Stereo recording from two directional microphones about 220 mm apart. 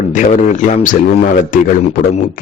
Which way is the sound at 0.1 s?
35° left (ahead or behind).